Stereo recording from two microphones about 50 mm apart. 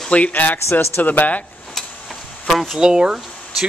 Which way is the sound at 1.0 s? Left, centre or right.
Left.